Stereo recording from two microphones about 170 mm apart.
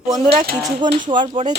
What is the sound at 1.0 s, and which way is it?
Speech, 50° right (ahead or behind).